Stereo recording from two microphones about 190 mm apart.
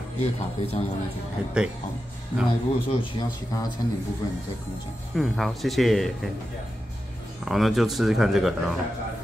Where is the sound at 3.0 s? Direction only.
20° left (ahead or behind).